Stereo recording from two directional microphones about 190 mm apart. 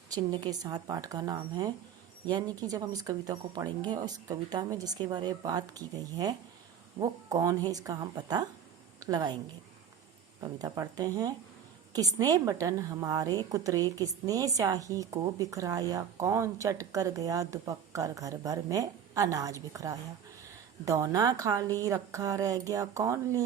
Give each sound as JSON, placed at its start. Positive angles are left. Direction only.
{"t": 0.1, "sound": "speech", "side_deg": -20}
{"t": 10.4, "sound": "speech", "side_deg": -20}